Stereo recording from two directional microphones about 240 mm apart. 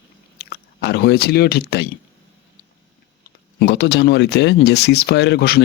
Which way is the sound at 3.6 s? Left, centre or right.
Left.